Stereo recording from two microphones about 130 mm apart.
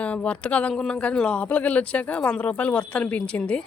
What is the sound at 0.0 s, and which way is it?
A woman's voice, 10° left (ahead or behind).